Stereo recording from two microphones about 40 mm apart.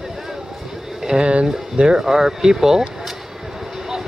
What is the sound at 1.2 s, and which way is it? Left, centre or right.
Speech, right.